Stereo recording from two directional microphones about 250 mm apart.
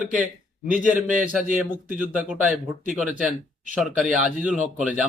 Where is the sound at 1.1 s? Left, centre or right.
Right.